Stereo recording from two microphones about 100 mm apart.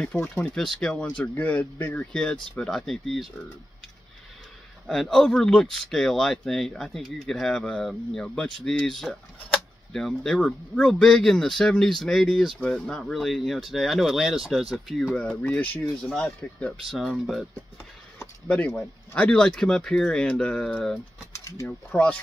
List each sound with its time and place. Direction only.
0.0 s speech: 10° left (ahead or behind)
2.5 s speech: 5° left (ahead or behind)
4.8 s speech: 5° left (ahead or behind)
15.4 s speech: 15° left (ahead or behind)
16.1 s speech: 5° left (ahead or behind)
18.2 s a sound: 15° left (ahead or behind)
18.7 s speech: 10° left (ahead or behind)